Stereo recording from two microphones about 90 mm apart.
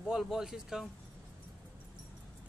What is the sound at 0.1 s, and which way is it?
Speech, 5° right (ahead or behind).